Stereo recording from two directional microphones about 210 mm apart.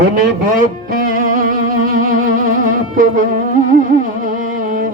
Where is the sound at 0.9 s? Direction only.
40° right (ahead or behind).